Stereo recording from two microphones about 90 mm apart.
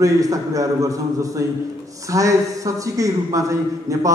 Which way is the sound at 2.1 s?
40° right (ahead or behind).